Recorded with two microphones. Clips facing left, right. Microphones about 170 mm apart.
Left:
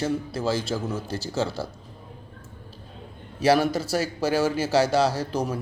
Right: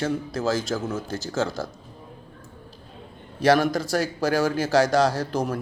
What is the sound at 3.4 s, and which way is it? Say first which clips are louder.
Speech: right 1 dB; 5° left (ahead or behind).